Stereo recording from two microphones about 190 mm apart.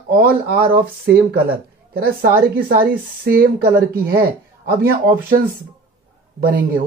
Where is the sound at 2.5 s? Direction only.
50° right (ahead or behind).